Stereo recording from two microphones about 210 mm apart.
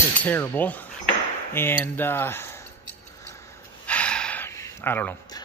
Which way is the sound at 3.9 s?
5° left (ahead or behind).